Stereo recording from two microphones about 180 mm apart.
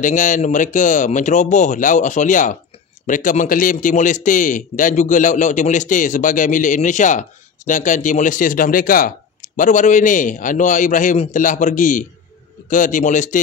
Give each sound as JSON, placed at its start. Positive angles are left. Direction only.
{"t": 0.0, "sound": "a man's voice", "side_deg": 45}